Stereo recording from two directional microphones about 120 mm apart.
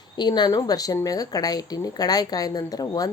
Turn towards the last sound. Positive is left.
turn(degrees=30)  # may be behind; listen again after turning